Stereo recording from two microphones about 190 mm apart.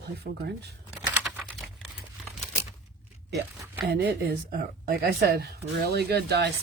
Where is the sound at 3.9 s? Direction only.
55° right (ahead or behind).